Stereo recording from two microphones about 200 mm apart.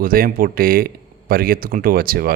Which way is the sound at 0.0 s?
45° right (ahead or behind).